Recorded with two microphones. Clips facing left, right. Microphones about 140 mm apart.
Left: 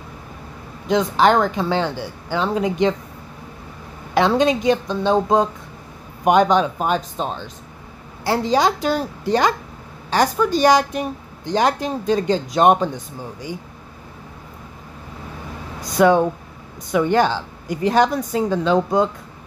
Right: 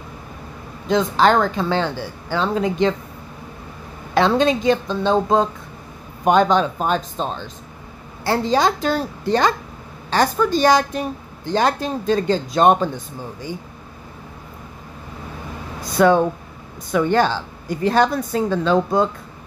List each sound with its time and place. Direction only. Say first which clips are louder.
0.8 s a woman's voice: even; 15° left (ahead or behind)
4.1 s a woman's voice: even; 15° left (ahead or behind)
15.8 s a woman's voice: even; 15° left (ahead or behind)